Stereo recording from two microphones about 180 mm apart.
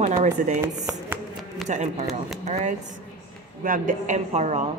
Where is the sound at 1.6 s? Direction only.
40° right (ahead or behind).